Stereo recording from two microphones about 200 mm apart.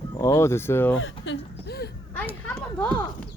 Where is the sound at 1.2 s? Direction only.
60° left (ahead or behind).